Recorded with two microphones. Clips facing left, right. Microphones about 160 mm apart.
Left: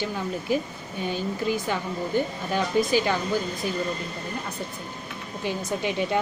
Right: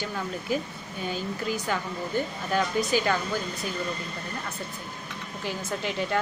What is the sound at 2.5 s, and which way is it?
Speech, 15° left (ahead or behind).